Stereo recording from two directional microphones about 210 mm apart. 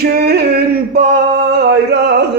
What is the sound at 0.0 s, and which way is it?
Male singing, 50° right (ahead or behind).